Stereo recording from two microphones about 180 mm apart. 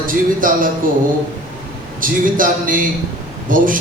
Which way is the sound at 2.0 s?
50° right (ahead or behind).